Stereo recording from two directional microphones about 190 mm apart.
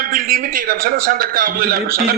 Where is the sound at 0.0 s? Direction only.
50° right (ahead or behind).